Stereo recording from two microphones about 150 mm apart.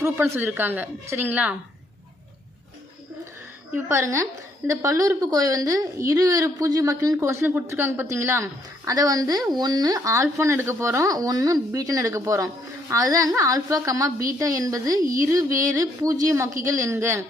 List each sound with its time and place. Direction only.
0.0 s a woman's voice: 15° right (ahead or behind)
3.8 s a woman's voice: 20° right (ahead or behind)